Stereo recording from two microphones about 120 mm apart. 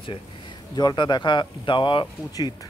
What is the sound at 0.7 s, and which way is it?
Speech, 35° left (ahead or behind).